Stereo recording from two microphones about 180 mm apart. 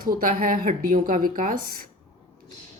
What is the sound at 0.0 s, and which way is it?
Speech, 50° right (ahead or behind).